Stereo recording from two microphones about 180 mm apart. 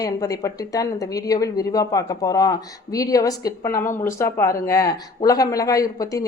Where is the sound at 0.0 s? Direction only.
20° left (ahead or behind).